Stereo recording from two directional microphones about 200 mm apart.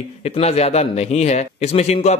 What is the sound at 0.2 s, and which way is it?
A man's voice, 30° left (ahead or behind).